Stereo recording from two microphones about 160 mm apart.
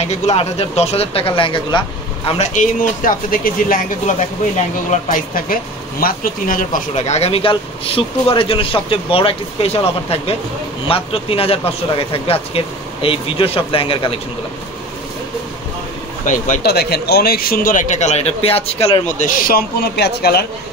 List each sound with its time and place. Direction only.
0.0 s speech: 45° left (ahead or behind)
2.2 s a man's voice: 45° left (ahead or behind); by 3.8 s 60° left (ahead or behind)
5.1 s speech: 60° left (ahead or behind); by 14.2 s 35° left (ahead or behind)
16.3 s speech: 55° left (ahead or behind)
16.6 s a man's voice: 85° left